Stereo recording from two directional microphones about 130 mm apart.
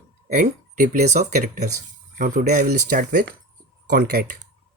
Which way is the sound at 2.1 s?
90° right.